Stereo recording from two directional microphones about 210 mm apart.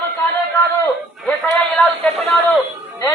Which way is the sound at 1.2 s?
5° left (ahead or behind).